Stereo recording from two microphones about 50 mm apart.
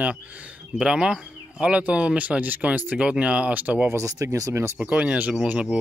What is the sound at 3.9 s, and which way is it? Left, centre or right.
Speech, right.